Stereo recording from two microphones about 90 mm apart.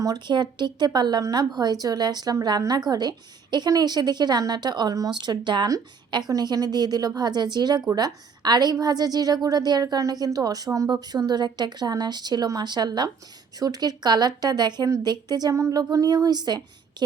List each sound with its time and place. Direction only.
0.3 s a woman's voice: 55° right (ahead or behind)